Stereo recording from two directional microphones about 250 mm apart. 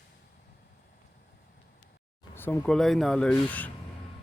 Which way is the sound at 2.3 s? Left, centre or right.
Centre.